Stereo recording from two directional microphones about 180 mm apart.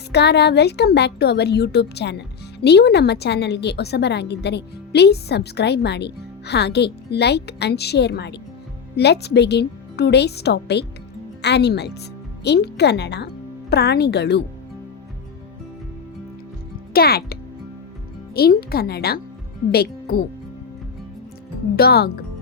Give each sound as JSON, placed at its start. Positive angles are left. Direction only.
{"t": 0.1, "sound": "a woman's voice", "side_deg": 70}
{"t": 16.9, "sound": "speech", "side_deg": 60}
{"t": 18.3, "sound": "speech", "side_deg": 60}
{"t": 21.8, "sound": "speech", "side_deg": 60}